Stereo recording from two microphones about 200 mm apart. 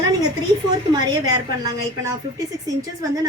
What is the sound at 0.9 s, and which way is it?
A woman's voice, 20° right (ahead or behind).